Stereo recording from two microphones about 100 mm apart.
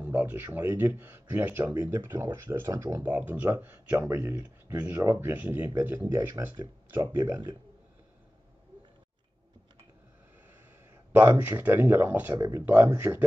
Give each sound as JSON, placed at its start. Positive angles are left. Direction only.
{"t": 0.0, "sound": "speech", "side_deg": -20}
{"t": 6.4, "sound": "speech", "side_deg": -30}
{"t": 11.1, "sound": "speech", "side_deg": -20}
{"t": 12.4, "sound": "speech", "side_deg": -30}
{"t": 12.6, "sound": "speech", "side_deg": -20}